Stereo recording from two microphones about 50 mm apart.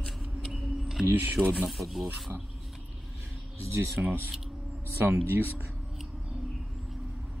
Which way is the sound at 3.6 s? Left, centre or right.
Right.